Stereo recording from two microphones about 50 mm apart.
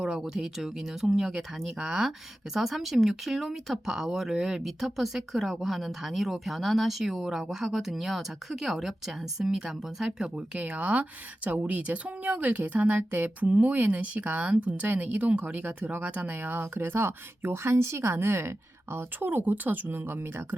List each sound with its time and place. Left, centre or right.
0.0 s a woman's voice: centre; by 16.9 s right
16.9 s speech: right